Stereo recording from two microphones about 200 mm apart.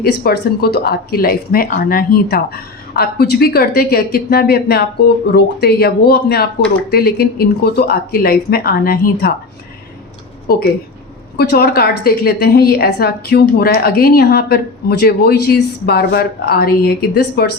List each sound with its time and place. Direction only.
0.0 s speech: 50° left (ahead or behind)
11.3 s speech: 50° left (ahead or behind)